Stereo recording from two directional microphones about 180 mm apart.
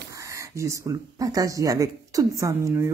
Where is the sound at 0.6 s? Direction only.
15° right (ahead or behind).